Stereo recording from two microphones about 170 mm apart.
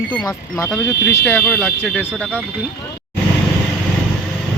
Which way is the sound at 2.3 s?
10° right (ahead or behind).